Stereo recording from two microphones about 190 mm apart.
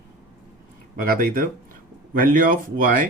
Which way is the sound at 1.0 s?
50° right (ahead or behind).